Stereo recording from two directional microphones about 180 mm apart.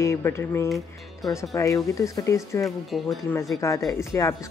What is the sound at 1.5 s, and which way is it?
Speech, 15° left (ahead or behind).